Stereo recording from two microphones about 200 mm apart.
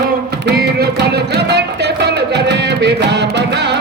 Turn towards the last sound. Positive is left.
turn(degrees=-60)  # may be behind; listen again after turning